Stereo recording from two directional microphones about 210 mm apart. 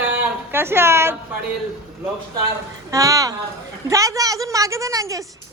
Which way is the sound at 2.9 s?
15° right (ahead or behind).